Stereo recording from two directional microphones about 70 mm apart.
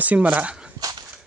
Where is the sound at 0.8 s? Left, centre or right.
Right.